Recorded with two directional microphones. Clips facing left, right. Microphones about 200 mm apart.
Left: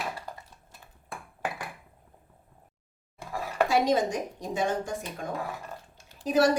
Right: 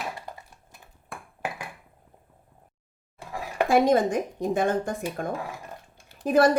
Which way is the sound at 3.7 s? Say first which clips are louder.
Right 6 dB; 55° right (ahead or behind).